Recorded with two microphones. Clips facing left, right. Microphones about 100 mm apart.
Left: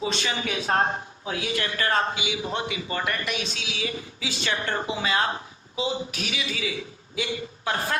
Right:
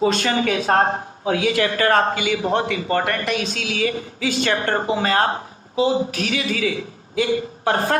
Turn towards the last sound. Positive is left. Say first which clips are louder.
# right 8 dB
turn(degrees=-50)  # may be behind; listen again after turning